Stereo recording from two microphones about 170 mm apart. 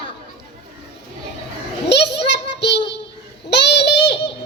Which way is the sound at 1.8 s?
90° left.